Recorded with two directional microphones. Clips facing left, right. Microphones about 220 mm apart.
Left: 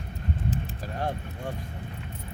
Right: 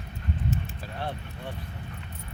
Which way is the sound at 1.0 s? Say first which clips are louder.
Left 3 dB; 45° left (ahead or behind).